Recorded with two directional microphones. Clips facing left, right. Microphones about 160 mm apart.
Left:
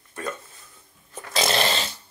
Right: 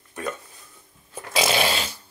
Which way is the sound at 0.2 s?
15° right (ahead or behind).